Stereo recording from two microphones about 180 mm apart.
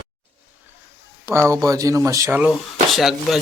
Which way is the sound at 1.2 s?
15° right (ahead or behind).